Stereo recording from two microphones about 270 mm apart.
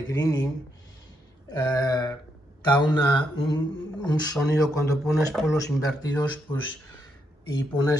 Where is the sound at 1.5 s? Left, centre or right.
Centre.